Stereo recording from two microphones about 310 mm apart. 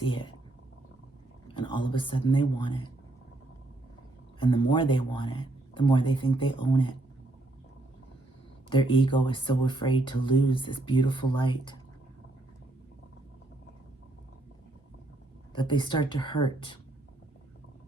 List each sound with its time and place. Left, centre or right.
0.0 s speech: centre
1.5 s speech: centre
4.4 s speech: centre
8.7 s speech: centre
15.5 s speech: centre